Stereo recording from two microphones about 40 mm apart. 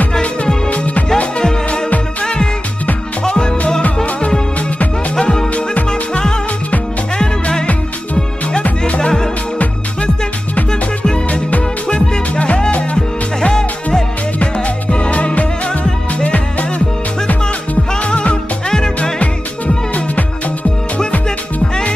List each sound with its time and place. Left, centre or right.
0.7 s music: left
3.3 s music: left
3.8 s music: left
5.9 s music: centre
8.6 s music: left
9.0 s music: centre
11.2 s music: left
12.9 s music: left
14.4 s music: left
18.0 s music: left